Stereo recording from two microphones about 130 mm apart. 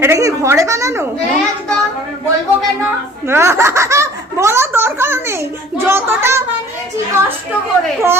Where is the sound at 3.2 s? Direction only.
20° right (ahead or behind).